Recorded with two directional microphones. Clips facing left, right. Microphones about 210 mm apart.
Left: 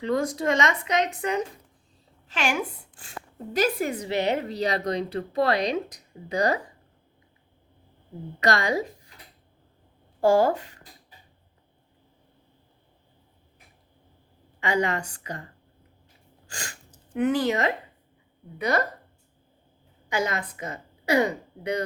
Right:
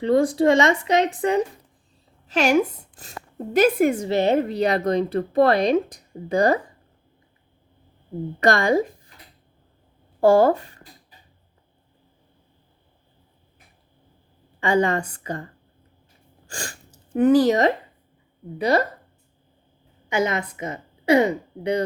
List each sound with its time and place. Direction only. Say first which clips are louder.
0.0 s a woman's voice: right 7 dB; 30° right (ahead or behind); by 6.6 s 50° right (ahead or behind)
8.4 s a woman's voice: right 6 dB; 50° right (ahead or behind)
10.2 s speech: right 4 dB; 55° right (ahead or behind)
14.6 s a woman's voice: right 5 dB; 50° right (ahead or behind)
17.2 s speech: right 7 dB; 35° right (ahead or behind)
20.1 s a woman's voice: right 5 dB; 25° right (ahead or behind)